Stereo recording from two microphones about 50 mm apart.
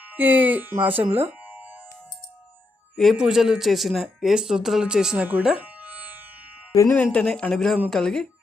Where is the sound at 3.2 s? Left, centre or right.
Centre.